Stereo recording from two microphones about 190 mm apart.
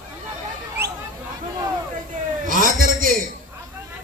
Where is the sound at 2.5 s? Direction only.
45° right (ahead or behind).